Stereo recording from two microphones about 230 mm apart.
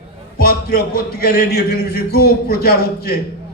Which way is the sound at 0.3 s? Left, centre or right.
Left.